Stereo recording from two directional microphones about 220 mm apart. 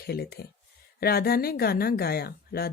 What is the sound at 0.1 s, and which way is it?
Speech, 45° left (ahead or behind).